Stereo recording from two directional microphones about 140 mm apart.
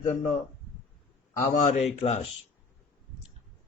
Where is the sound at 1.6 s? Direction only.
55° left (ahead or behind).